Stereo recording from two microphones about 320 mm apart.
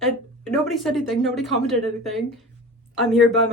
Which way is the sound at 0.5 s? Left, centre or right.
Centre.